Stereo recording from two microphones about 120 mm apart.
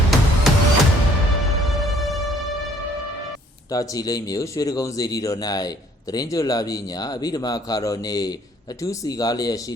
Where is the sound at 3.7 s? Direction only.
30° left (ahead or behind).